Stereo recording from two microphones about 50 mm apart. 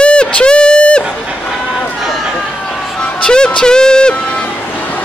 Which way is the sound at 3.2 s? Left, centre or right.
Centre.